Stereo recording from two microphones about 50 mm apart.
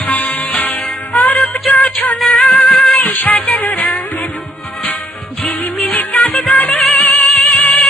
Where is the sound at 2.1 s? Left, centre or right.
Centre.